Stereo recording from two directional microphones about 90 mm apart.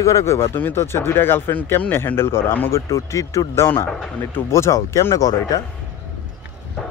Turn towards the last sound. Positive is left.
turn(degrees=40)  # may be behind; listen again after turning